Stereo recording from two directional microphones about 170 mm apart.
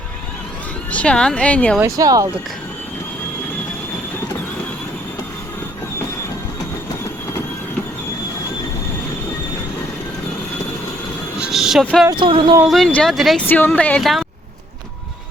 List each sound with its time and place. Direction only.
0.9 s speech: 5° left (ahead or behind)
1.8 s speech: 20° right (ahead or behind)
11.3 s vehicle: centre (ahead or behind)
12.1 s speech: 30° right (ahead or behind)
12.6 s speech: centre (ahead or behind)
13.5 s speech: 10° left (ahead or behind)